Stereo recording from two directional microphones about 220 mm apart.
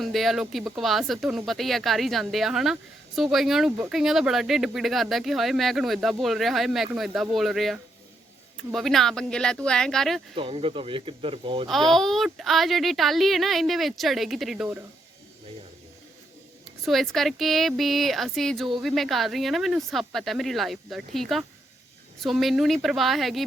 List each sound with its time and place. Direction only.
0.0 s speech: centre (ahead or behind)
10.3 s speech: 25° right (ahead or behind)
11.7 s speech: centre (ahead or behind)
16.8 s speech: centre (ahead or behind)